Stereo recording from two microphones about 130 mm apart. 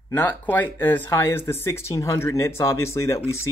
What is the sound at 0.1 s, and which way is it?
Speech, 15° left (ahead or behind).